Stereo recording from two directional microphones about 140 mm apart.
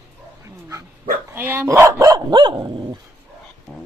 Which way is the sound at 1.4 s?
15° right (ahead or behind).